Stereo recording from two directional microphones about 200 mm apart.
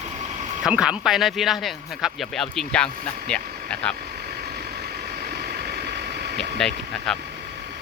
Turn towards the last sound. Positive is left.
turn(degrees=0)  # may be behind; listen again after turning